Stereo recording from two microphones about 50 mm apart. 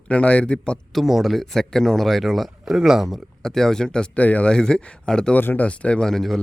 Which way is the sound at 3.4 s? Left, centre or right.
Centre.